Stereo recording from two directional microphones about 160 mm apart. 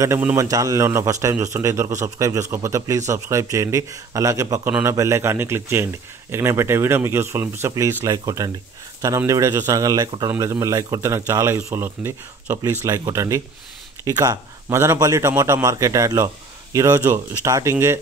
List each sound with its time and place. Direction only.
0.0 s speech: 15° right (ahead or behind)